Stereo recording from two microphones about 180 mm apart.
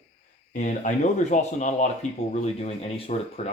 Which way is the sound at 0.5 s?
40° left (ahead or behind).